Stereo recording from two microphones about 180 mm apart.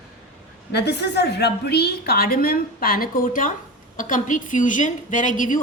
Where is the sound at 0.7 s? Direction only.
70° left (ahead or behind).